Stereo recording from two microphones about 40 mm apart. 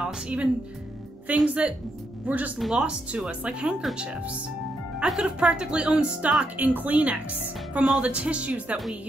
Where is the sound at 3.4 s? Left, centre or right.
Right.